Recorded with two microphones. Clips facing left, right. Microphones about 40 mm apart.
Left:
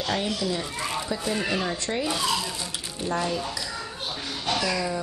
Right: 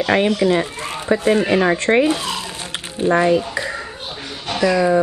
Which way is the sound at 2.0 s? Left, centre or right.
Right.